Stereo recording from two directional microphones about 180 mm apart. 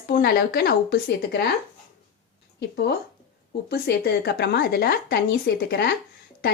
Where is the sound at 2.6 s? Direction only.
65° left (ahead or behind).